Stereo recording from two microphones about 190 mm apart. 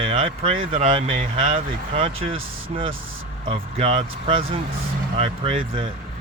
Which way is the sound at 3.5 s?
30° right (ahead or behind).